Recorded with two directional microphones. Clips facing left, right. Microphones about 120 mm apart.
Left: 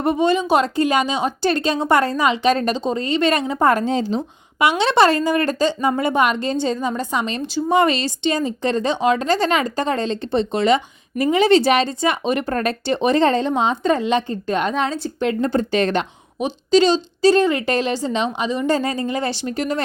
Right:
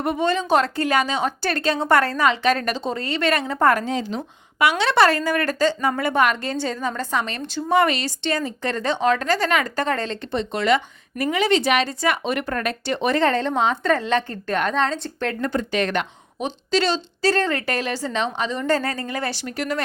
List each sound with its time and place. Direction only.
0.2 s a woman's voice: 15° left (ahead or behind)
3.8 s a woman's voice: 30° left (ahead or behind); by 15.3 s 10° left (ahead or behind)
15.3 s a woman's voice: 25° left (ahead or behind)
16.4 s a woman's voice: 15° left (ahead or behind)